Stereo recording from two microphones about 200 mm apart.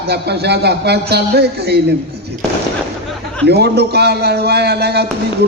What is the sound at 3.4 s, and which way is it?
A man's voice, 55° right (ahead or behind).